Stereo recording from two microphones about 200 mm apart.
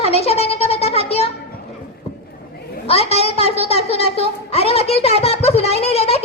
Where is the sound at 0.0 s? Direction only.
30° left (ahead or behind).